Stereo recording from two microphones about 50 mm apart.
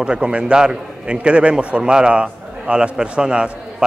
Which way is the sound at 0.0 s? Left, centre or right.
Right.